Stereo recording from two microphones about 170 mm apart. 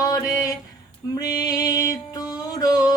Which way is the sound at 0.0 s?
20° left (ahead or behind).